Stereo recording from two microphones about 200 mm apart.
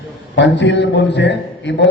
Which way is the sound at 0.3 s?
65° left (ahead or behind).